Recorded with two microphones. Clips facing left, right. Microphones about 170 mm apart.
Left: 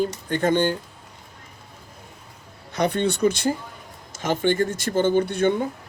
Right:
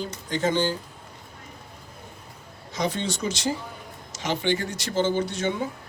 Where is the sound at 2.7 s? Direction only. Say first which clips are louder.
Left 5 dB; 60° left (ahead or behind).